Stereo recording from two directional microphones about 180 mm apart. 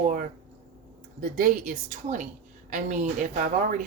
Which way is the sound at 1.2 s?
50° right (ahead or behind).